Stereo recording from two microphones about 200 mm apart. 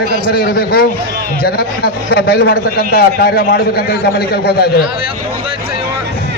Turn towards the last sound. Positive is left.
turn(degrees=50)  # may be behind; listen again after turning